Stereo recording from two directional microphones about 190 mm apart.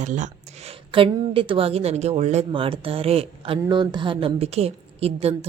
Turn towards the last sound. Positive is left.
turn(degrees=-30)  # may be behind; listen again after turning